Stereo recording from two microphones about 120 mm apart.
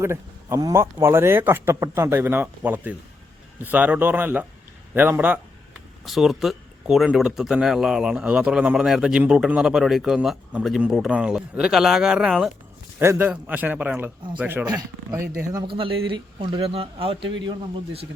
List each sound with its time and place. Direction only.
0.0 s a man's voice: 25° right (ahead or behind)
6.1 s speech: centre (ahead or behind)
13.0 s a man's voice: 20° right (ahead or behind)
15.6 s speech: 50° right (ahead or behind)